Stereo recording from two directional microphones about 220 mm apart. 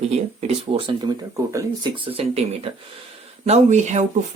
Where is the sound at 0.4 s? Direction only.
25° right (ahead or behind).